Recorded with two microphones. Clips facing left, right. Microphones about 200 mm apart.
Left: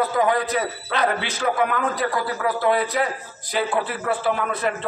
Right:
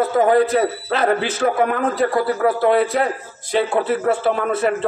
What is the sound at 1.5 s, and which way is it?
Speech, 35° right (ahead or behind).